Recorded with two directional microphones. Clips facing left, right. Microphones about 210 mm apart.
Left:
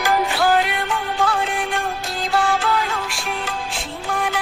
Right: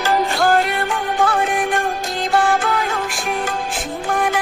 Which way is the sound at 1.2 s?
55° right (ahead or behind).